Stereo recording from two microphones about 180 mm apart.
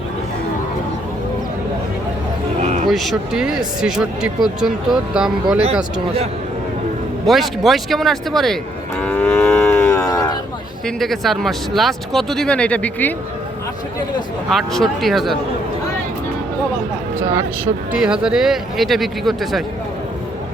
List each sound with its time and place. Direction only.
2.6 s a sound: 40° right (ahead or behind)
2.9 s speech: centre (ahead or behind)
7.3 s speech: centre (ahead or behind)
9.0 s livestock: 10° left (ahead or behind)
10.8 s speech: centre (ahead or behind)
14.5 s speech: centre (ahead or behind)
17.9 s speech: 5° right (ahead or behind)